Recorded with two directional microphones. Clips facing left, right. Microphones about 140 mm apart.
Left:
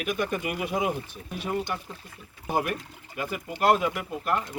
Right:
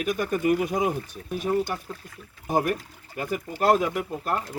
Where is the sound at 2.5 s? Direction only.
45° right (ahead or behind).